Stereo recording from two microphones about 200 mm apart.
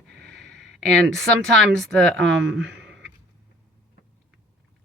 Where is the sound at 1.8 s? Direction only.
5° left (ahead or behind).